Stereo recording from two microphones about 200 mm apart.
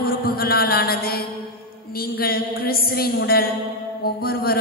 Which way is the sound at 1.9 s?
50° left (ahead or behind).